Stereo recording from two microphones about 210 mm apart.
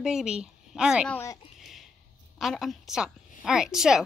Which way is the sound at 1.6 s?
Centre (ahead or behind).